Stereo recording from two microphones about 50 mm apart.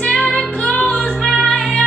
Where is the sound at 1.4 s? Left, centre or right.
Left.